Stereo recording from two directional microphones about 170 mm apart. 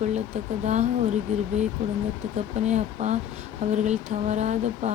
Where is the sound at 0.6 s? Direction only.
45° right (ahead or behind).